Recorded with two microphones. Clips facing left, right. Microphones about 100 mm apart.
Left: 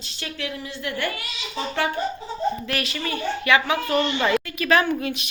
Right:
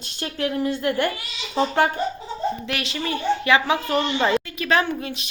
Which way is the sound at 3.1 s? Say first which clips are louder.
Right 2 dB; 25° right (ahead or behind).